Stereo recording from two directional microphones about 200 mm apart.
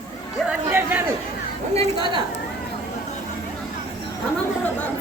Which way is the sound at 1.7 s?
25° right (ahead or behind).